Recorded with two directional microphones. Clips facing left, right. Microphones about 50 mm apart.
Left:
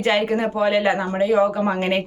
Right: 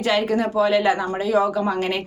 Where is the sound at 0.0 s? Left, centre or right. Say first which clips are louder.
Left 1 dB; left.